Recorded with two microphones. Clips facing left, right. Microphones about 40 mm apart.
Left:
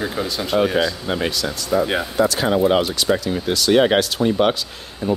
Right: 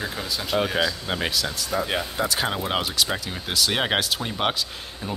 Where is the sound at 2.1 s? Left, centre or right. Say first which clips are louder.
Left 7 dB; centre.